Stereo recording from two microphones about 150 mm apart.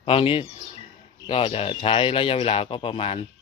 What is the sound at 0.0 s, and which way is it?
A man's voice, 40° left (ahead or behind).